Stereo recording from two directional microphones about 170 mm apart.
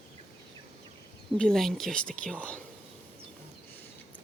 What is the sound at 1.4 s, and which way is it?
Speech, centre (ahead or behind).